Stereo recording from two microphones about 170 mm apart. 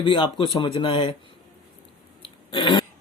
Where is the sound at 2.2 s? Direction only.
30° left (ahead or behind).